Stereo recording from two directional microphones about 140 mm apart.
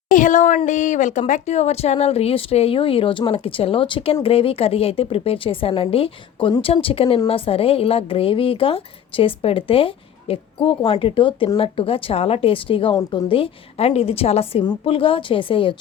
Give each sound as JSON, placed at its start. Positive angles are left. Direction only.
{"t": 0.1, "sound": "a woman's voice", "side_deg": 65}